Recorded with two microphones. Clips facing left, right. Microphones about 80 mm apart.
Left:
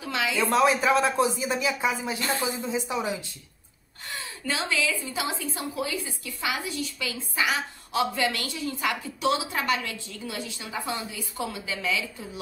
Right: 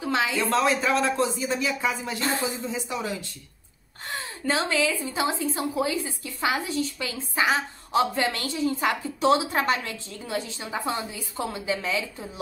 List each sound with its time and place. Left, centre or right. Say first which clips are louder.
0.0 s a sound: right 3 dB; right
0.4 s speech: left 5 dB; centre
4.0 s a woman's voice: right 4 dB; right